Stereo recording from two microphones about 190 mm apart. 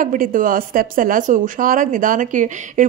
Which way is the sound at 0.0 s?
45° right (ahead or behind).